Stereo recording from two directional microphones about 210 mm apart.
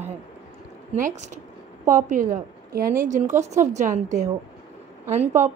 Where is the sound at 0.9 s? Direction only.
35° right (ahead or behind).